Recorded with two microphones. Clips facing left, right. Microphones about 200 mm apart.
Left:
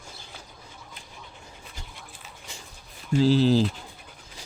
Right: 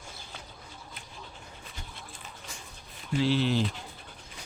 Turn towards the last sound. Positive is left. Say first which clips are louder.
# left 7 dB
turn(degrees=35)  # may be behind; listen again after turning